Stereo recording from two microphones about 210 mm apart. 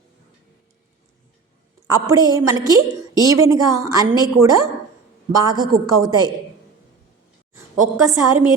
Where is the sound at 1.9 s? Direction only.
15° right (ahead or behind).